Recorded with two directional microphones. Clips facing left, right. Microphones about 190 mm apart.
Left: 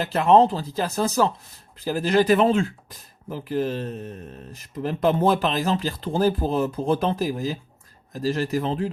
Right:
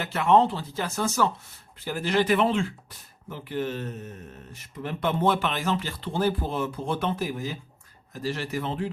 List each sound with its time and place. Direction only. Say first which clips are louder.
0.0 s speech: left 4 dB; 35° left (ahead or behind)